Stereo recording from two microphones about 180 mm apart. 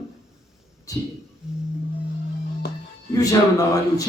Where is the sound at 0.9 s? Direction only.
20° left (ahead or behind).